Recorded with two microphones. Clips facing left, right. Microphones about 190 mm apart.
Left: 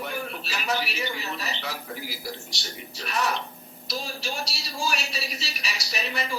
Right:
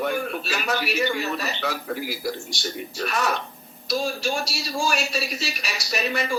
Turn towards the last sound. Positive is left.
turn(degrees=-50)  # may be behind; listen again after turning